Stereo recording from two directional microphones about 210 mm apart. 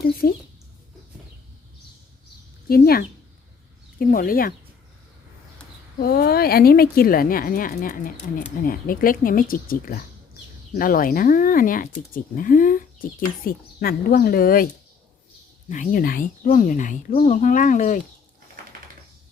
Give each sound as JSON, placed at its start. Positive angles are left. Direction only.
{"t": 0.0, "sound": "a woman's voice", "side_deg": 45}
{"t": 2.6, "sound": "a woman's voice", "side_deg": 45}
{"t": 6.0, "sound": "a woman's voice", "side_deg": 45}
{"t": 15.7, "sound": "speech", "side_deg": 40}